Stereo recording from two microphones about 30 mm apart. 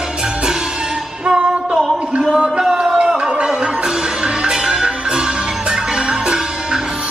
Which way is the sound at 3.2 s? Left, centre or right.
Right.